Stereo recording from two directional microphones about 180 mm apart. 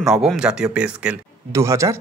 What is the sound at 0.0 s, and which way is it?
A man's voice, 5° right (ahead or behind).